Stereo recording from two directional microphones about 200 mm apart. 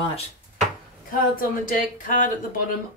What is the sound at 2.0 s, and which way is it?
Speech, 40° left (ahead or behind).